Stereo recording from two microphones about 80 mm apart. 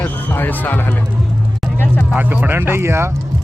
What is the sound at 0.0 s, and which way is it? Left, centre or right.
Speech, left.